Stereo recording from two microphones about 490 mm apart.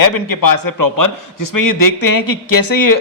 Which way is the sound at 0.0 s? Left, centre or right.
Left.